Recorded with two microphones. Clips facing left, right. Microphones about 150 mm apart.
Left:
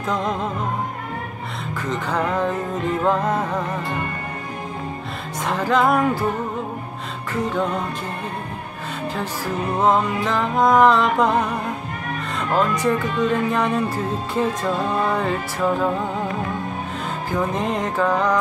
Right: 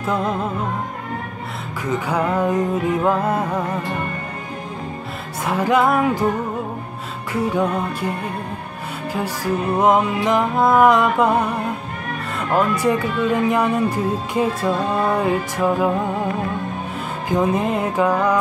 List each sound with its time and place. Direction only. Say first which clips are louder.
0.0 s music: right 2 dB; 5° right (ahead or behind)
1.9 s speech: right 3 dB; 10° right (ahead or behind)
5.4 s speech: right 2 dB; 10° right (ahead or behind)
5.9 s music: right 1 dB; 5° right (ahead or behind)
9.1 s speech: right 6 dB; 10° right (ahead or behind)
10.5 s speech: even; 5° right (ahead or behind)
12.4 s speech: right 2 dB; 10° right (ahead or behind)
17.3 s speech: right 5 dB; 15° right (ahead or behind)
17.6 s speech: right 2 dB; 5° right (ahead or behind)